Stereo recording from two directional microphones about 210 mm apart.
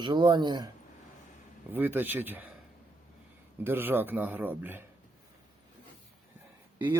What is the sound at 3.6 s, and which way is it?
A man's voice, 10° right (ahead or behind).